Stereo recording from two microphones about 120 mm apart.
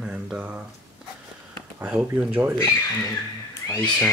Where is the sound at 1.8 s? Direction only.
15° right (ahead or behind).